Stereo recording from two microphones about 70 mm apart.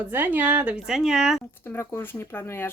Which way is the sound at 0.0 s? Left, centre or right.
Right.